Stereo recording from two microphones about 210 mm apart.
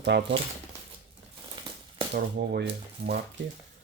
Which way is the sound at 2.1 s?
50° right (ahead or behind).